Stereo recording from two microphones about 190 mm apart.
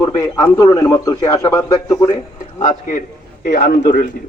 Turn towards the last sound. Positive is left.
turn(degrees=50)  # may be behind; listen again after turning